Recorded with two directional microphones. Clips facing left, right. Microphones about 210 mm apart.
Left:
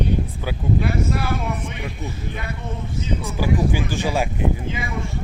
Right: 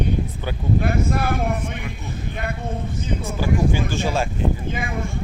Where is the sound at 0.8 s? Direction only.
50° right (ahead or behind).